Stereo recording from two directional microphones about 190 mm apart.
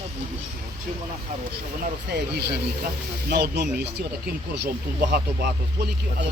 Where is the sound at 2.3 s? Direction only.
60° right (ahead or behind).